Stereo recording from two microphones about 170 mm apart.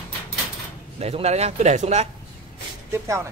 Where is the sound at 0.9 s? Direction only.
35° right (ahead or behind).